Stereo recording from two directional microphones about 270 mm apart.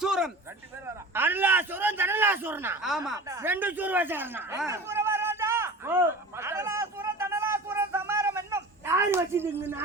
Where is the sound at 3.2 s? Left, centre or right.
Centre.